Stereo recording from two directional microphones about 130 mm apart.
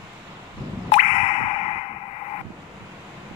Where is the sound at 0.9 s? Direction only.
50° left (ahead or behind).